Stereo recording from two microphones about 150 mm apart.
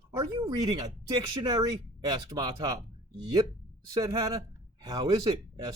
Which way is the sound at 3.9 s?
20° right (ahead or behind).